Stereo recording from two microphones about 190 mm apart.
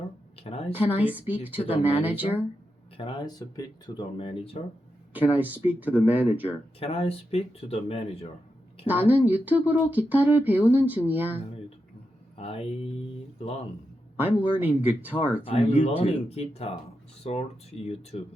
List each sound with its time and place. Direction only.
0.3 s a sound: 30° left (ahead or behind)
0.7 s speech: 10° right (ahead or behind)
3.0 s speech: 25° left (ahead or behind)
5.1 s speech: 10° right (ahead or behind)
6.7 s speech: 30° left (ahead or behind)
8.9 s speech: 10° right (ahead or behind)
12.4 s speech: 30° left (ahead or behind)
14.2 s speech: 10° right (ahead or behind)
15.4 s speech: 30° left (ahead or behind)